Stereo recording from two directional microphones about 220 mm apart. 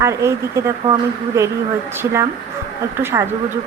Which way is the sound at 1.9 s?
10° right (ahead or behind).